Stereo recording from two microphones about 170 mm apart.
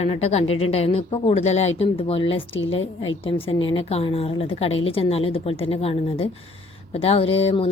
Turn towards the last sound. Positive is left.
turn(degrees=35)  # may be behind; listen again after turning